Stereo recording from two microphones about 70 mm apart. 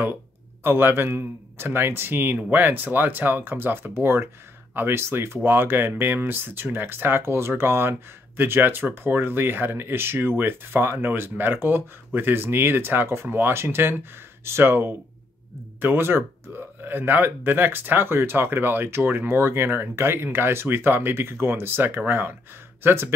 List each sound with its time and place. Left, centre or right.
0.7 s speech: right